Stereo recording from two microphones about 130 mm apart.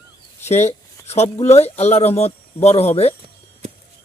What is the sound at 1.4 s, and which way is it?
Speech, 55° left (ahead or behind).